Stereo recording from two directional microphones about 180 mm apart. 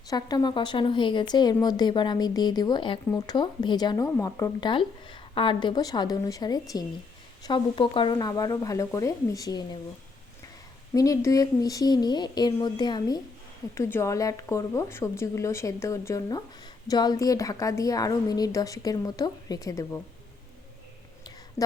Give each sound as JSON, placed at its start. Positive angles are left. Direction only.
{"t": 0.1, "sound": "speech", "side_deg": 20}
{"t": 10.9, "sound": "speech", "side_deg": 20}